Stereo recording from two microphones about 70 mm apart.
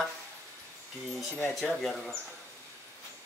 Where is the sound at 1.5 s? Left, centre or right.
Centre.